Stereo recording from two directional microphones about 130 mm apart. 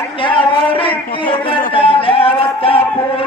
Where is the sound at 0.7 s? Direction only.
40° left (ahead or behind).